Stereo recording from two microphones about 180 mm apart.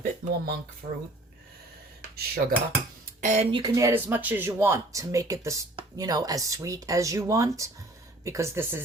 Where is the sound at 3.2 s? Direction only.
45° right (ahead or behind).